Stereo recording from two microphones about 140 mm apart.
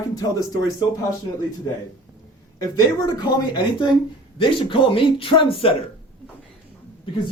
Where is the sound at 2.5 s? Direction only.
25° left (ahead or behind); by 5.7 s 40° left (ahead or behind).